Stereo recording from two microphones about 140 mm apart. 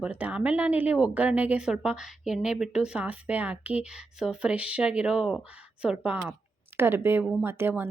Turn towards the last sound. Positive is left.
turn(degrees=-15)  # may be behind; listen again after turning